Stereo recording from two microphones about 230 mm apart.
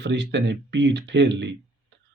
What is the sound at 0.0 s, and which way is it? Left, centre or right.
Speech, right.